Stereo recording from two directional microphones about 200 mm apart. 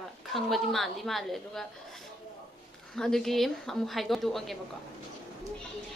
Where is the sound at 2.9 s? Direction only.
Centre (ahead or behind).